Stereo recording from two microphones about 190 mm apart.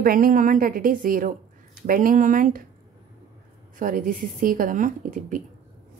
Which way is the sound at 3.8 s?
45° right (ahead or behind).